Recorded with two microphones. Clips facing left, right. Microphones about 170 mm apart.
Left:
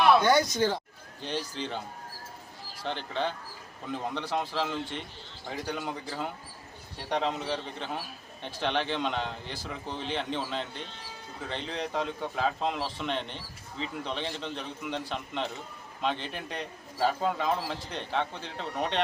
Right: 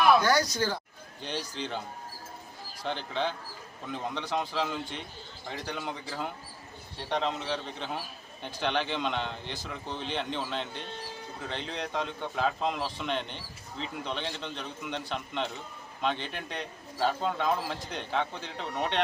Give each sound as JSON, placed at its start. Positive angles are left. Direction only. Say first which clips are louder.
{"t": 0.2, "sound": "speech", "louder": "left 3 dB", "side_deg": 25}
{"t": 1.2, "sound": "a man's voice", "louder": "left 2 dB", "side_deg": 0}
{"t": 2.8, "sound": "a man's voice", "louder": "even", "side_deg": 0}